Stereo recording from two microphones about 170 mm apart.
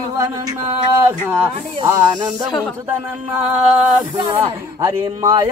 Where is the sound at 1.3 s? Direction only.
15° right (ahead or behind).